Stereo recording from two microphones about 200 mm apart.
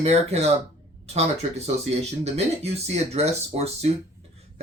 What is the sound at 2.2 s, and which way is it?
Speech, 30° right (ahead or behind).